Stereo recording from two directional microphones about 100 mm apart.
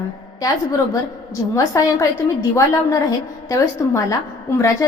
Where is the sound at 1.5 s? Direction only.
35° left (ahead or behind).